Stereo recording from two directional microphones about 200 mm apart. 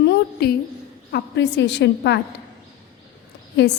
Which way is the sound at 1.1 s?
60° left (ahead or behind).